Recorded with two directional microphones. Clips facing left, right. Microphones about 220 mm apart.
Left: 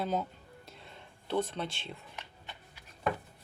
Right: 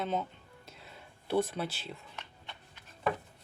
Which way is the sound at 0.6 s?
Centre (ahead or behind).